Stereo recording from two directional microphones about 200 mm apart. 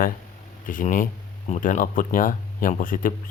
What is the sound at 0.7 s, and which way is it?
Speech, 40° left (ahead or behind).